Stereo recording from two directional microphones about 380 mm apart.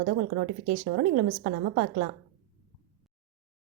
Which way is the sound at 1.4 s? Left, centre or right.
Right.